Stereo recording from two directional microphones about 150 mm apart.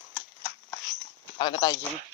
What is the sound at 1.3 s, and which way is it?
Speech, 35° left (ahead or behind).